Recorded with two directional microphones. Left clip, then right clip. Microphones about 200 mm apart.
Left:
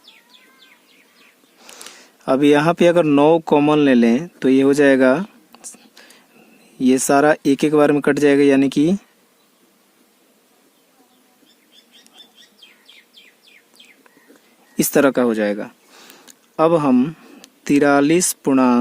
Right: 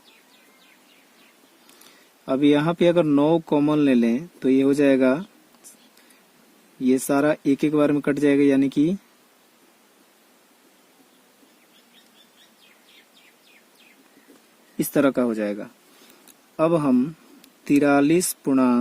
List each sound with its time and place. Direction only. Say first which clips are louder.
2.2 s a man's voice: left 6 dB; 40° left (ahead or behind)
6.7 s a man's voice: left 6 dB; 35° left (ahead or behind)
14.8 s speech: left 6 dB; 35° left (ahead or behind)